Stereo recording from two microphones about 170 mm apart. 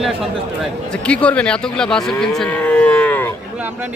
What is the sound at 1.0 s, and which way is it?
Moo, 5° left (ahead or behind).